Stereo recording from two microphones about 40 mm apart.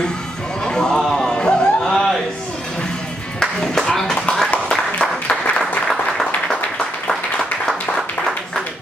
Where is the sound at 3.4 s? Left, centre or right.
Centre.